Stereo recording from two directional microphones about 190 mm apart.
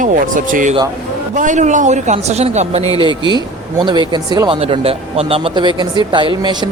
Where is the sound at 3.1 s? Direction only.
25° left (ahead or behind).